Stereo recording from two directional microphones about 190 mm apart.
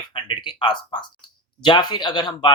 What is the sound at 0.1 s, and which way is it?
Speech, 25° left (ahead or behind).